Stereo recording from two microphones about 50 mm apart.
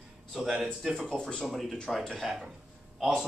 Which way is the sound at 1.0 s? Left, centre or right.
Centre.